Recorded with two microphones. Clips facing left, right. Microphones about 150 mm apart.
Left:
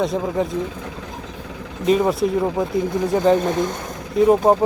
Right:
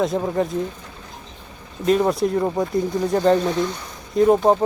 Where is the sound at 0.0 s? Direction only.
Centre (ahead or behind).